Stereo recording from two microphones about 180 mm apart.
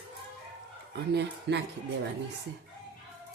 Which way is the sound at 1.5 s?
75° right (ahead or behind).